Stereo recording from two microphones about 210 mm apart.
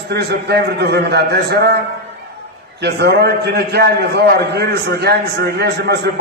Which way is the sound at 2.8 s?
50° right (ahead or behind).